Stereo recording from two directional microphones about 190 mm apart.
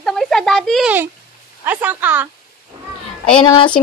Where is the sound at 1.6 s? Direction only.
10° right (ahead or behind).